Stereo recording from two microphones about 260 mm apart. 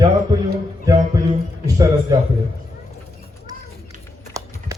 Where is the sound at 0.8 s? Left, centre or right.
Centre.